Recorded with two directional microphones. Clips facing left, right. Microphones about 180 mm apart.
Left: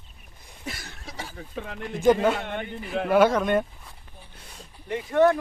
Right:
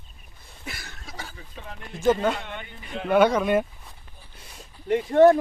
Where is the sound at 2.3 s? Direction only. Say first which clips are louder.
Left 5 dB; 50° left (ahead or behind).